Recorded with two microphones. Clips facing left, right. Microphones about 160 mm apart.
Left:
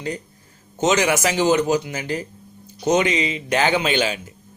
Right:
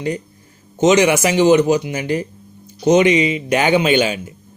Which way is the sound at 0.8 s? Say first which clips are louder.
Right 6 dB; 15° right (ahead or behind).